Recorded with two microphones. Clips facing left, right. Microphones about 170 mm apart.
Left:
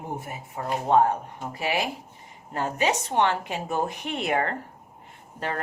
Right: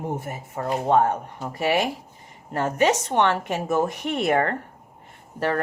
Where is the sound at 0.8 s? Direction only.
65° right (ahead or behind).